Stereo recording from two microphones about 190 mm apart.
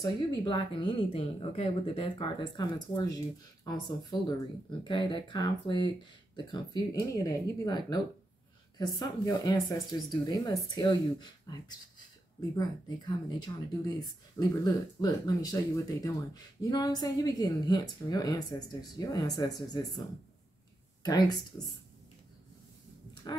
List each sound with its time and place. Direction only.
0.0 s speech: 25° left (ahead or behind)
6.9 s speech: 15° left (ahead or behind)
21.0 s speech: 20° left (ahead or behind)
23.3 s speech: 25° left (ahead or behind)